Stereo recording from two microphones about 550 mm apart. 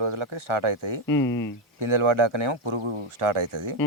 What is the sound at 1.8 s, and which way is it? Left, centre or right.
Speech, right.